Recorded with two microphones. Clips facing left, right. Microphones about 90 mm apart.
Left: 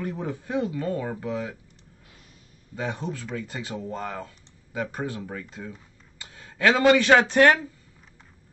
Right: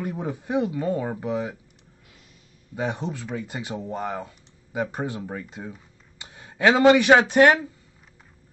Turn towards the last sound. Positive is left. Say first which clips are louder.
# right 2 dB
turn(degrees=-15)  # may be behind; listen again after turning